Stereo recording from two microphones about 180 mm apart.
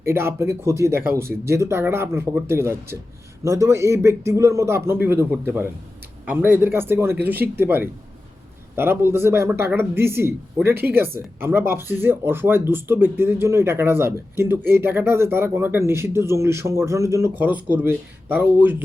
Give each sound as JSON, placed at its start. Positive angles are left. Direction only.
{"t": 0.0, "sound": "speech", "side_deg": -15}